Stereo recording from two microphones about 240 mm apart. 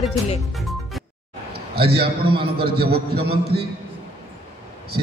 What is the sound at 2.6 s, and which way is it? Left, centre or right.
Speech, right.